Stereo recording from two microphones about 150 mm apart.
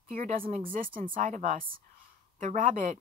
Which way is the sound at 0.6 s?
65° right (ahead or behind).